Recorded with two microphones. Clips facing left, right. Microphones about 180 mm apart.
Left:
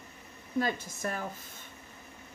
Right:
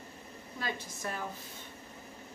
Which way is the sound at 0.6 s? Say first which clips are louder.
Left 6 dB; 45° left (ahead or behind).